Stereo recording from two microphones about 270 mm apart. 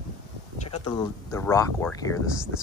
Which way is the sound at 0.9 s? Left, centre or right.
Centre.